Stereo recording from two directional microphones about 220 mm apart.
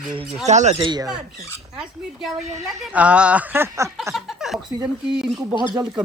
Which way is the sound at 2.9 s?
5° right (ahead or behind).